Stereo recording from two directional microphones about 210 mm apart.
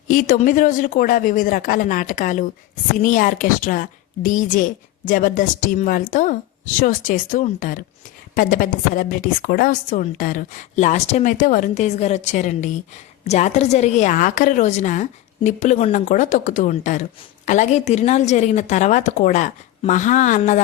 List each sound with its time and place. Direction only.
0.1 s a woman's voice: 40° left (ahead or behind)